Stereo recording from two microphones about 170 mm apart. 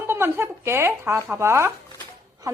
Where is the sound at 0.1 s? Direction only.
15° right (ahead or behind).